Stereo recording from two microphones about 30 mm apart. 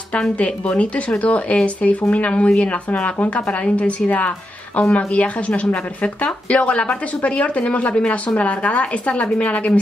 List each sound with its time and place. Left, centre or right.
0.4 s a woman's voice: left
3.3 s a woman's voice: left